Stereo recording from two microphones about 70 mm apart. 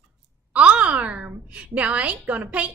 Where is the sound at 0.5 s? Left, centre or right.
Centre.